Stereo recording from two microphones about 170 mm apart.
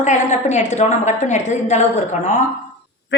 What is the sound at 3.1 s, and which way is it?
Honk, 90° left.